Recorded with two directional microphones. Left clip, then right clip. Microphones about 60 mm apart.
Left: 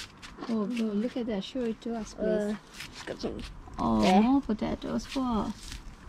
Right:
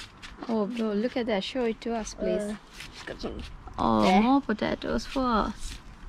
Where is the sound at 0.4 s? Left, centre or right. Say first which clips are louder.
Right 4 dB; centre.